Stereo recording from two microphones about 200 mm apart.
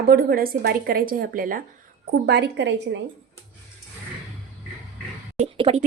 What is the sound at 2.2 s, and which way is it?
Speech, 55° right (ahead or behind).